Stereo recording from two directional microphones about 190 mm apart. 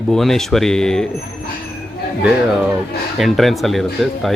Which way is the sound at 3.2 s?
Centre (ahead or behind).